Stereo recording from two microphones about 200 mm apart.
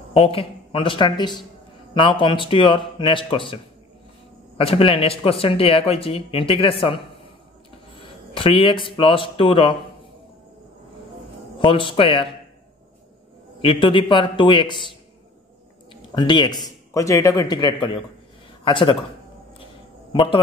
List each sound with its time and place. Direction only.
0.1 s speech: 30° left (ahead or behind)
4.6 s speech: 30° left (ahead or behind)
8.4 s speech: 25° left (ahead or behind)
11.6 s speech: 25° left (ahead or behind)
13.6 s speech: 25° left (ahead or behind)
15.9 s a man's voice: 20° left (ahead or behind)
20.1 s speech: 25° left (ahead or behind)